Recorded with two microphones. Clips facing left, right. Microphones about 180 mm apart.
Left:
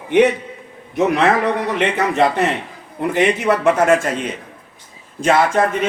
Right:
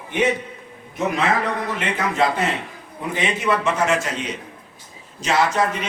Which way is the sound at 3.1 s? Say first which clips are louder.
Left 6 dB; 65° left (ahead or behind).